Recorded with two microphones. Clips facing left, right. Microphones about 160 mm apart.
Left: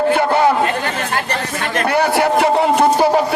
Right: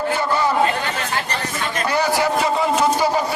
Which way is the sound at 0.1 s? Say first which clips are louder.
Left 5 dB; 65° left (ahead or behind).